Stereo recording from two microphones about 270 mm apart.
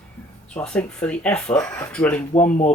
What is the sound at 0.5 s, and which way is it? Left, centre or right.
Speech, centre.